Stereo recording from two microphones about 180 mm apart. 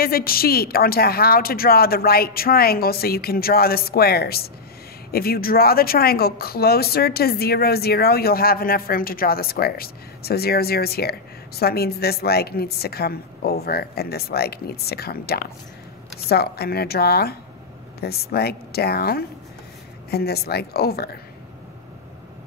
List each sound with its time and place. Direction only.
0.0 s speech: 55° left (ahead or behind)